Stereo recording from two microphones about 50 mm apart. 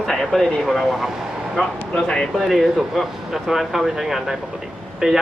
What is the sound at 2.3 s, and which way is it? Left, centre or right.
Speech, centre.